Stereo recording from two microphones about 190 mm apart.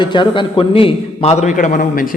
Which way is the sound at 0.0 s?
25° left (ahead or behind).